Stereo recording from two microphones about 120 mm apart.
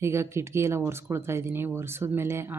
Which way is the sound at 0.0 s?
20° right (ahead or behind).